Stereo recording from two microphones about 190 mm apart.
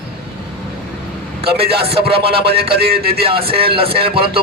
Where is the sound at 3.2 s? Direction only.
30° right (ahead or behind).